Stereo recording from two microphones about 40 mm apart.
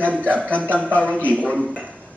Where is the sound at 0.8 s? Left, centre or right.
Right.